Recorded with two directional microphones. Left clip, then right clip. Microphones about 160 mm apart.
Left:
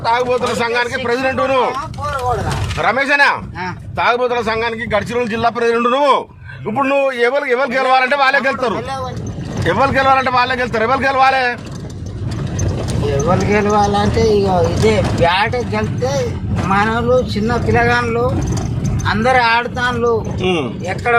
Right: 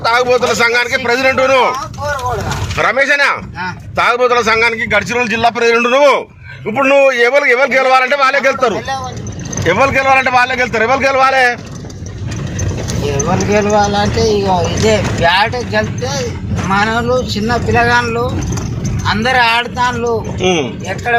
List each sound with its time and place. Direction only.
0.0 s a man's voice: 10° right (ahead or behind)
2.7 s a man's voice: 15° right (ahead or behind)
13.2 s a man's voice: 5° right (ahead or behind)